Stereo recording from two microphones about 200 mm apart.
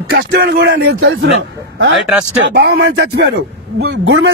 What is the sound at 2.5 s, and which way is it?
Speech, 60° right (ahead or behind).